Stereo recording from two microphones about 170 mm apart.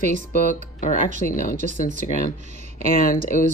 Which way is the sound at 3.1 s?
50° left (ahead or behind).